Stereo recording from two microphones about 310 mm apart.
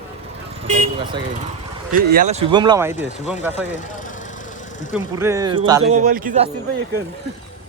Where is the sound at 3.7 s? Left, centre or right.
Left.